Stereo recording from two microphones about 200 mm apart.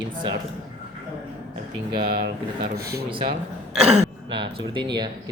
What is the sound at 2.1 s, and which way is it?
Speech, 50° right (ahead or behind).